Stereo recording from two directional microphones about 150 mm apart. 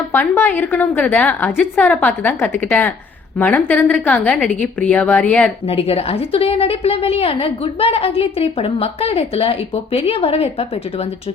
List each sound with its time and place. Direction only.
0.1 s a woman's voice: 15° left (ahead or behind)
5.6 s a woman's voice: 40° left (ahead or behind)